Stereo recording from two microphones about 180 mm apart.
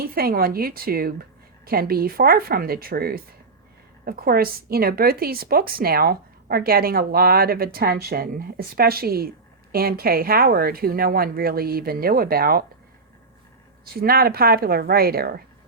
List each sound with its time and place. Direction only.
0.0 s a woman's voice: 55° right (ahead or behind)
13.8 s a woman's voice: 55° right (ahead or behind)